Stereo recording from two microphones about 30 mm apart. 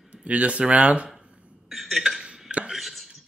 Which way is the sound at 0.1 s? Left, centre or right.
Right.